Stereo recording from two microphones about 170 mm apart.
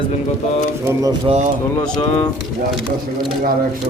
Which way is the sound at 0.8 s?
15° right (ahead or behind).